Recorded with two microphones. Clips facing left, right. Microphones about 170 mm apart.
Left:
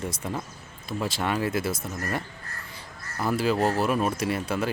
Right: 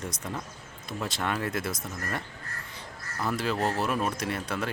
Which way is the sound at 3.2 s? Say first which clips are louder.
Left 5 dB; 5° left (ahead or behind).